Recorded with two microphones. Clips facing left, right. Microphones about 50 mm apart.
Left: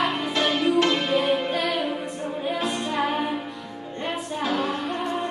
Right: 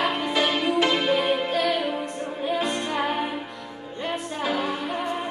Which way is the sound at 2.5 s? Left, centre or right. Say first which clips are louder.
Right 1 dB; centre.